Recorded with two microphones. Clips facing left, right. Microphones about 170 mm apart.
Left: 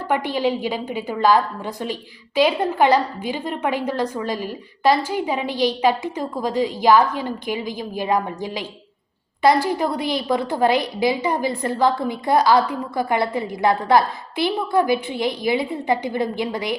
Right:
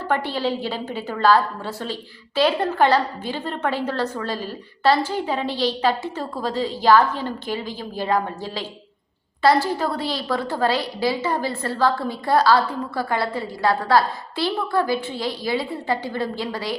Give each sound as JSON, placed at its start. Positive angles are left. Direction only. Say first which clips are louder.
{"t": 0.1, "sound": "a woman's voice", "louder": "left 2 dB", "side_deg": 15}